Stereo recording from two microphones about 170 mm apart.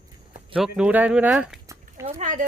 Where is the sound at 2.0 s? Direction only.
45° right (ahead or behind).